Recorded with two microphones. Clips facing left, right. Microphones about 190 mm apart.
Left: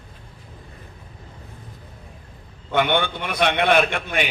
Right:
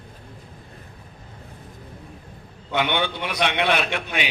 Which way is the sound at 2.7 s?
50° left (ahead or behind).